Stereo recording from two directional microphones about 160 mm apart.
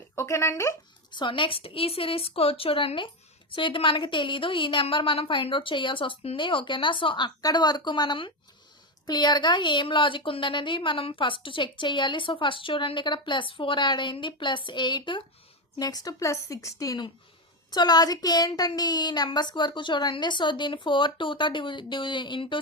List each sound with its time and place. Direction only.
0.2 s speech: 15° left (ahead or behind)
1.1 s a woman's voice: 30° left (ahead or behind)